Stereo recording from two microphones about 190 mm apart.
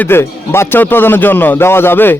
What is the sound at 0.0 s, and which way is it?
A man's voice, 10° left (ahead or behind).